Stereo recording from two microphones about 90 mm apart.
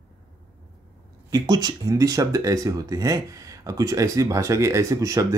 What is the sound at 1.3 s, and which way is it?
Speech, 50° right (ahead or behind).